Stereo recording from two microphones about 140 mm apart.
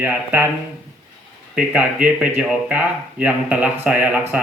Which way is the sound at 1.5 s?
10° right (ahead or behind).